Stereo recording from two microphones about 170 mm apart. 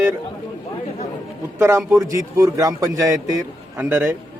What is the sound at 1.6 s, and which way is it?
A man's voice, 15° right (ahead or behind).